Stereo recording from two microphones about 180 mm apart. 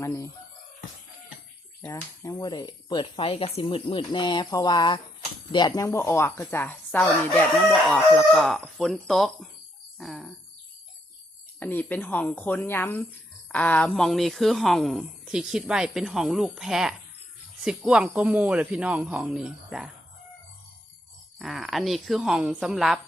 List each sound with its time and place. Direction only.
0.0 s chicken: 15° left (ahead or behind)
1.8 s speech: 15° left (ahead or behind)
10.0 s chicken: centre (ahead or behind)
11.6 s speech: 10° left (ahead or behind)
21.3 s speech: centre (ahead or behind)